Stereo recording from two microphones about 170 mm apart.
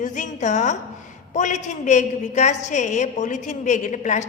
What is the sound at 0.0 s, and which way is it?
A woman's voice, 45° left (ahead or behind).